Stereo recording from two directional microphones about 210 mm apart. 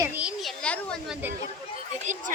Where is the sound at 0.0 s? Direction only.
5° right (ahead or behind).